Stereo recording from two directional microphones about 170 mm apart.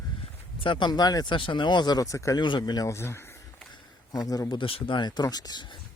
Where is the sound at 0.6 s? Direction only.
25° left (ahead or behind).